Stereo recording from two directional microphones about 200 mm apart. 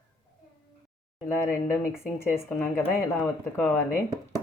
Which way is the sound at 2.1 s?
10° left (ahead or behind).